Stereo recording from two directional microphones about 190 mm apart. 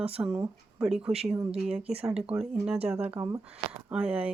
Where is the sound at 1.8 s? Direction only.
30° right (ahead or behind).